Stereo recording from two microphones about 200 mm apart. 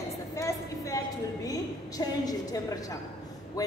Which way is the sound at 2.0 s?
20° left (ahead or behind).